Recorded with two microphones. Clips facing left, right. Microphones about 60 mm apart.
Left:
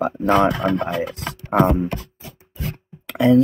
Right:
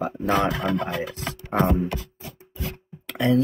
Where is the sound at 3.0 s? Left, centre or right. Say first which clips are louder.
Left 6 dB; centre.